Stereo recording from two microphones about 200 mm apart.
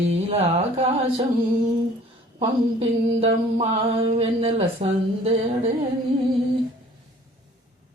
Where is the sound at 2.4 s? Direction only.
30° right (ahead or behind).